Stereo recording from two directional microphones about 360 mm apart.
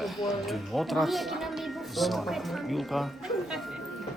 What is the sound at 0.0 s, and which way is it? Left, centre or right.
Speech, centre.